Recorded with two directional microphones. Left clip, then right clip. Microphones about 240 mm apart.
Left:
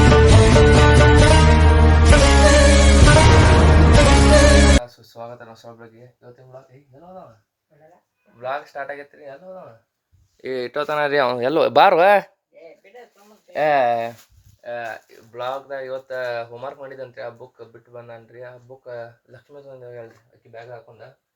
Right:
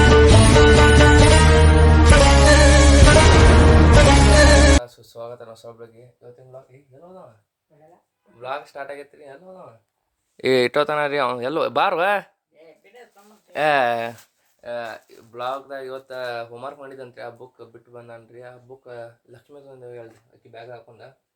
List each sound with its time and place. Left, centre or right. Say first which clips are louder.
0.0 s music: right 1 dB; centre
8.4 s speech: left 3 dB; centre
10.3 s a sound: right 9 dB; right
10.8 s speech: left 2 dB; centre
13.5 s speech: left 1 dB; centre
14.6 s speech: left 1 dB; right
15.3 s speech: left 1 dB; centre